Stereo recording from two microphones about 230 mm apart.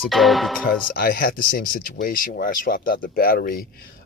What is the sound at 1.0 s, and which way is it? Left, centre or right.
Speech, left.